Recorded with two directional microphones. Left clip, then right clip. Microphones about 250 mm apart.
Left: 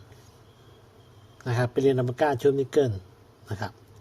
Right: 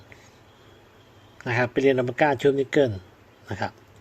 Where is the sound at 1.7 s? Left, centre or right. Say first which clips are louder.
Even; centre.